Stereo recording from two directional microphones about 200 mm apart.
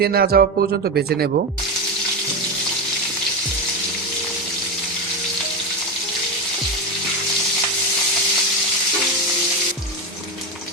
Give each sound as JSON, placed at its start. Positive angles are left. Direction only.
{"t": 0.0, "sound": "speech", "side_deg": -50}